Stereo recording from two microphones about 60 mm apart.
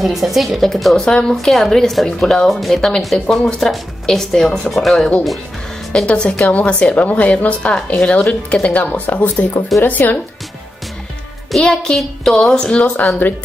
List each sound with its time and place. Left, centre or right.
0.0 s a child's voice: centre
6.0 s a child's voice: centre
11.5 s a child's voice: centre; by 13.3 s left